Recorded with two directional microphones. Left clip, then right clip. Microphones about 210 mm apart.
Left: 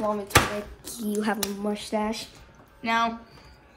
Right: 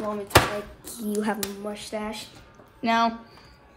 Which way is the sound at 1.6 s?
15° left (ahead or behind).